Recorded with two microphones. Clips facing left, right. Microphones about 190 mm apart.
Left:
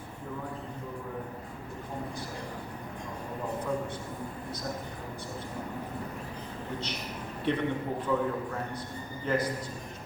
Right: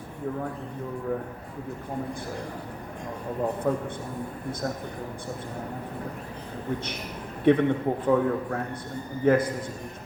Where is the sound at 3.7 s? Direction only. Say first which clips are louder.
Right 6 dB; 55° right (ahead or behind).